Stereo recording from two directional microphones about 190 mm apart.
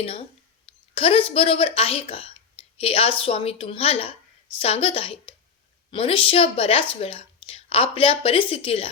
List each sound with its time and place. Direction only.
0.6 s a woman's voice: 30° left (ahead or behind)